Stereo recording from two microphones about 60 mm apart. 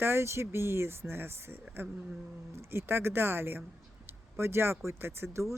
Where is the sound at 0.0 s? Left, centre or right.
Right.